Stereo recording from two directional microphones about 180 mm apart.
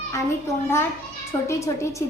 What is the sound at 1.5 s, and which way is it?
Speech, 15° left (ahead or behind).